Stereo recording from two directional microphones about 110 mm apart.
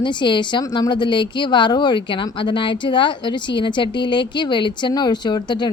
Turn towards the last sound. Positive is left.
turn(degrees=40)  # may be behind; listen again after turning